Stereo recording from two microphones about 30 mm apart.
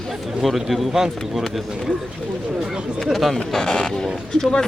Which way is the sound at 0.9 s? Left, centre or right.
Centre.